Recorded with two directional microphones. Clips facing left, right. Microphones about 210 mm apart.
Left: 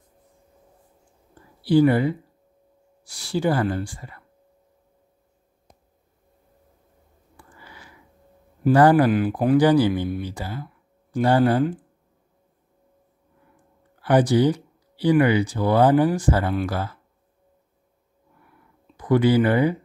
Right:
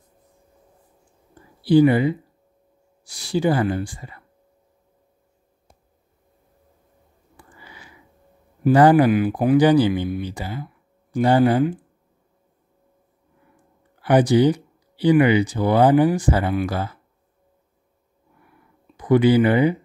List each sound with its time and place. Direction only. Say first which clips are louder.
1.6 s speech: right 2 dB; 15° right (ahead or behind)
7.3 s a sound: right 1 dB; 15° right (ahead or behind)
8.6 s speech: right 2 dB; 15° right (ahead or behind)
14.0 s speech: right 2 dB; 15° right (ahead or behind)
18.9 s speech: right 3 dB; 20° right (ahead or behind)